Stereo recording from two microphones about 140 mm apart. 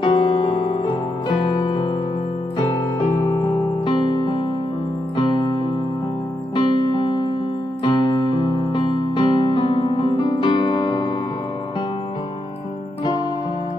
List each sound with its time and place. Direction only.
0.0 s music: 35° left (ahead or behind)
3.4 s music: 35° left (ahead or behind)